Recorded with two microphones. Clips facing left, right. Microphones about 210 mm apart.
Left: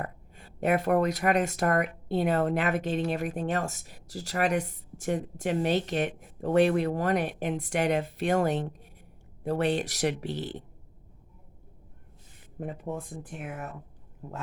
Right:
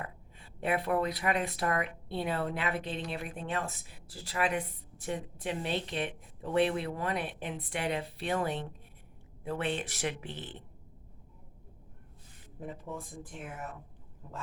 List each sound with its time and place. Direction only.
0.0 s speech: 45° left (ahead or behind)
12.5 s speech: 60° left (ahead or behind)